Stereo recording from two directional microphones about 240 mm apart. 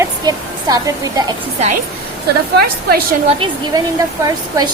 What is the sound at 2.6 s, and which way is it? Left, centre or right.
Speech, right.